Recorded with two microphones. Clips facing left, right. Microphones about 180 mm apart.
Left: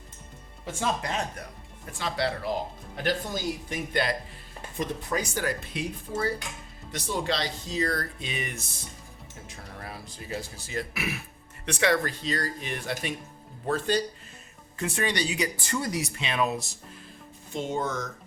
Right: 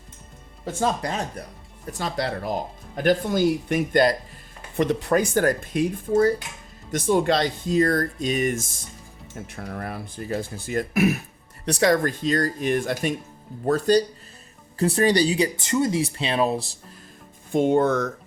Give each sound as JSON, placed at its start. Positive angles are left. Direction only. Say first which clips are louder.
{"t": 0.6, "sound": "speech", "louder": "right 5 dB", "side_deg": -35}
{"t": 4.0, "sound": "speech", "louder": "right 9 dB", "side_deg": -40}
{"t": 4.8, "sound": "speech", "louder": "right 9 dB", "side_deg": -75}
{"t": 9.3, "sound": "speech", "louder": "right 11 dB", "side_deg": -60}
{"t": 17.5, "sound": "speech", "louder": "right 11 dB", "side_deg": -55}